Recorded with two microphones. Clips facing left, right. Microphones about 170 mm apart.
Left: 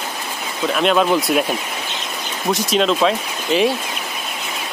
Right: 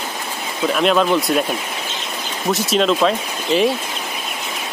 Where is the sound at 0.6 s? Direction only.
Centre (ahead or behind).